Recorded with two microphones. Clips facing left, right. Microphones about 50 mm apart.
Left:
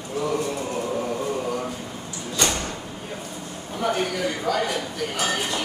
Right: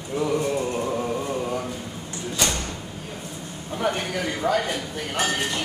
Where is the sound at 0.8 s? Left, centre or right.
Centre.